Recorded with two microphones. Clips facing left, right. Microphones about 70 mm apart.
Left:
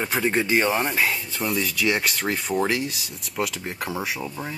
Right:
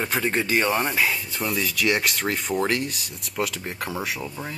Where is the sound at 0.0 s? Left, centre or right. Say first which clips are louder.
Left 1 dB; centre.